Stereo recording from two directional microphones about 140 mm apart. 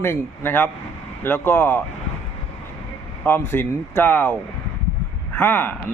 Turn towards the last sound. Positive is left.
turn(degrees=15)  # may be behind; listen again after turning